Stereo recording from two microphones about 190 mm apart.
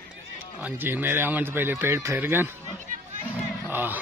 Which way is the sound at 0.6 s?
10° right (ahead or behind).